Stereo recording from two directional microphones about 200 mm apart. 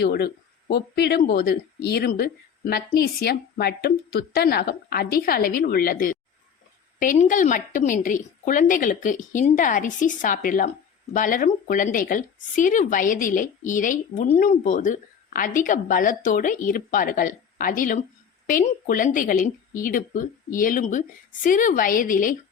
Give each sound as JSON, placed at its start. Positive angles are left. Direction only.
{"t": 0.0, "sound": "a woman's voice", "side_deg": 50}